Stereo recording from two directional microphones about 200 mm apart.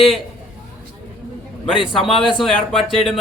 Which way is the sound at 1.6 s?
25° left (ahead or behind).